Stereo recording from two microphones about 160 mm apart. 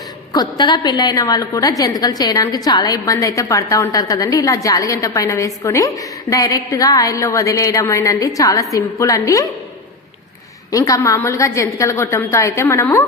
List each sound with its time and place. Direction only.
0.3 s a woman's voice: 25° left (ahead or behind)
10.7 s a woman's voice: 20° left (ahead or behind)